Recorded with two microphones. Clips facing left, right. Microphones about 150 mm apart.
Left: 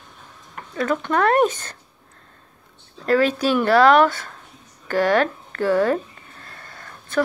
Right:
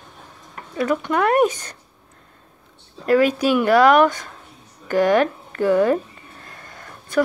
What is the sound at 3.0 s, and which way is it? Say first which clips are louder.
Speech: right 2 dB; 10° right (ahead or behind).